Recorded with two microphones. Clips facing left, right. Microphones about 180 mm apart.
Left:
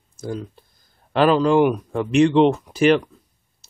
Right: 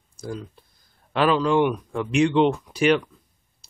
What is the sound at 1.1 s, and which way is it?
Speech, centre (ahead or behind).